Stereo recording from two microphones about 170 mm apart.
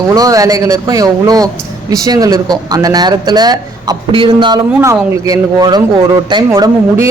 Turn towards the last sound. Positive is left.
turn(degrees=-15)  # may be behind; listen again after turning